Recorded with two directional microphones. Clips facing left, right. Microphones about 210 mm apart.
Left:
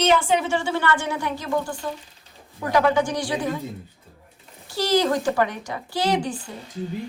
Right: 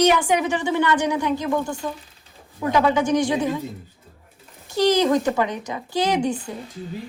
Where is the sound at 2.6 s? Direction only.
20° right (ahead or behind).